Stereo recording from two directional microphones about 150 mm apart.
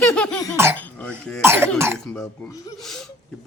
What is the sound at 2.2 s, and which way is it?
Speech, 20° left (ahead or behind).